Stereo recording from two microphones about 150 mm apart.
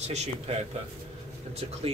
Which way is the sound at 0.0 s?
45° right (ahead or behind).